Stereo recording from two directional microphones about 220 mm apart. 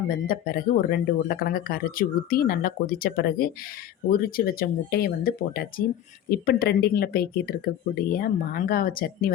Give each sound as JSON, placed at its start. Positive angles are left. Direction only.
{"t": 0.3, "sound": "speech", "side_deg": 40}